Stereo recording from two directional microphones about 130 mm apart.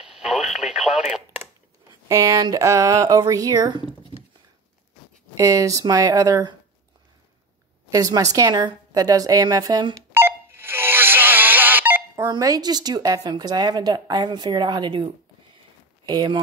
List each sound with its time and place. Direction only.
0.0 s radio: 5° right (ahead or behind)
2.0 s a woman's voice: 25° right (ahead or behind)
5.4 s a woman's voice: 25° right (ahead or behind)
7.9 s a woman's voice: 25° right (ahead or behind)
10.1 s telephone dialing: 20° right (ahead or behind)
12.2 s a woman's voice: 25° right (ahead or behind)
16.1 s a woman's voice: 35° right (ahead or behind)